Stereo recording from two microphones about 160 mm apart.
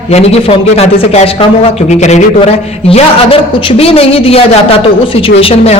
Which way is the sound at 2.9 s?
35° left (ahead or behind).